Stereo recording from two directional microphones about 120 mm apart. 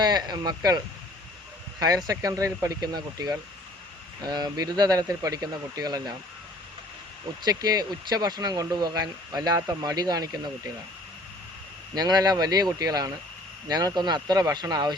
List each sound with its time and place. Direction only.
0.0 s speech: 35° right (ahead or behind)
2.0 s speech: 30° right (ahead or behind)
7.4 s speech: 35° right (ahead or behind)
11.9 s speech: 35° right (ahead or behind)